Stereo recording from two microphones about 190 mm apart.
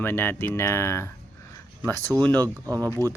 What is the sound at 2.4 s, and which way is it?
Speech, 15° right (ahead or behind).